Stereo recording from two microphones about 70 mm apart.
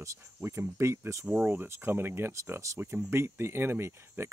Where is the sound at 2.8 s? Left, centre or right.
Right.